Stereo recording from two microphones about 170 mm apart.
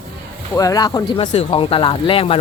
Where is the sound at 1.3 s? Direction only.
35° left (ahead or behind).